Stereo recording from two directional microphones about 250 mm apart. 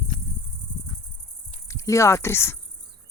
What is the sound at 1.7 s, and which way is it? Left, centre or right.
Speech, centre.